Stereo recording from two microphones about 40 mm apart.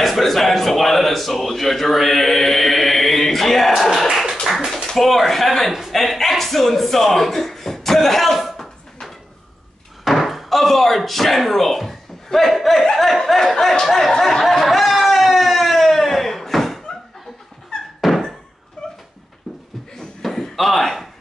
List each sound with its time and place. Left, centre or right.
0.0 s speech: centre
5.7 s a man's voice: centre
5.9 s speech: centre
10.0 s speech: centre
14.4 s a sound: centre
18.0 s thunk: centre
18.8 s dog: centre
20.2 s a sound: centre